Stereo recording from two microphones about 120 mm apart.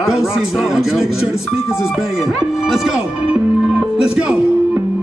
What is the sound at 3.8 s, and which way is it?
Music, 5° right (ahead or behind).